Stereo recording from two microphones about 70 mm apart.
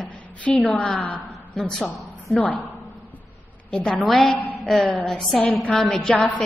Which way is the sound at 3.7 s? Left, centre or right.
Centre.